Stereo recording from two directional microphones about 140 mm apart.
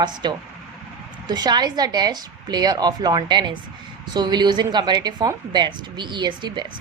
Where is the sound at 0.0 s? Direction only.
30° right (ahead or behind).